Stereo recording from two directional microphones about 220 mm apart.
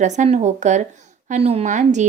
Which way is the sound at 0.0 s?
30° right (ahead or behind).